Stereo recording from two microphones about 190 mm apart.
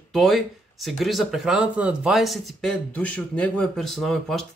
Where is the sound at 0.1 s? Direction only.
Centre (ahead or behind).